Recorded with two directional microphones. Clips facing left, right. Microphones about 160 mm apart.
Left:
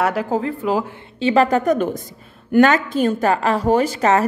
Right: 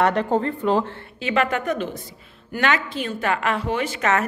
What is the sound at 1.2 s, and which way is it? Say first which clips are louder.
A woman's voice: left 7 dB; 35° left (ahead or behind).